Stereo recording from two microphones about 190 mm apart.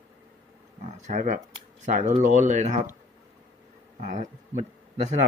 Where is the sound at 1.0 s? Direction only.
45° right (ahead or behind).